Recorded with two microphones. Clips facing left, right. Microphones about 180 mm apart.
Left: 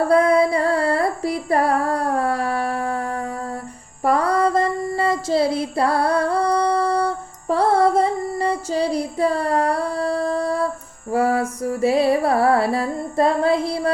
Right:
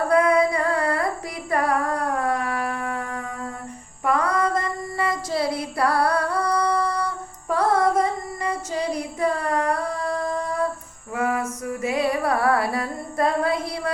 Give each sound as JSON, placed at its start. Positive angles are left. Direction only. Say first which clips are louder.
{"t": 0.1, "sound": "female singing", "louder": "left 2 dB", "side_deg": 30}
{"t": 4.0, "sound": "a sound", "louder": "left 4 dB", "side_deg": 35}
{"t": 11.1, "sound": "music", "louder": "left 5 dB", "side_deg": 35}